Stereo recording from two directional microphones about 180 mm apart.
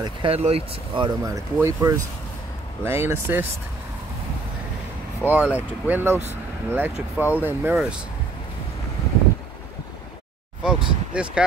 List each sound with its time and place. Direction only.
0.0 s speech: 30° right (ahead or behind); by 3.4 s 15° right (ahead or behind)
5.2 s speech: 10° right (ahead or behind)
10.6 s speech: 5° right (ahead or behind)